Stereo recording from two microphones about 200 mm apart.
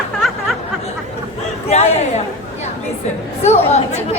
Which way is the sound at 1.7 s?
35° left (ahead or behind).